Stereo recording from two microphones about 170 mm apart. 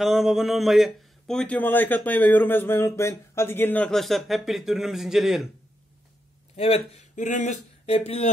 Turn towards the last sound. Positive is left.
turn(degrees=40)  # may be behind; listen again after turning